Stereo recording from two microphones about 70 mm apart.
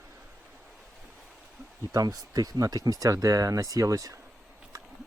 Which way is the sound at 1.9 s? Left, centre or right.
Right.